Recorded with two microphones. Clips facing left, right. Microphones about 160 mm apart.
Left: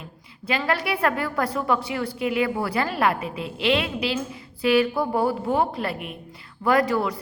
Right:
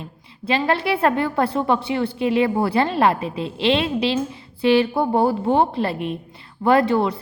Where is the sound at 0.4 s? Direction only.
25° right (ahead or behind).